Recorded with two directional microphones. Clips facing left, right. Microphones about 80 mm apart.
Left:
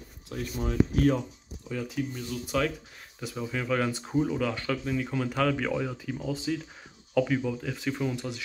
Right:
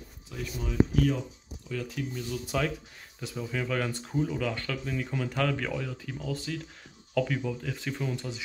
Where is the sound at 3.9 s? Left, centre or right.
Centre.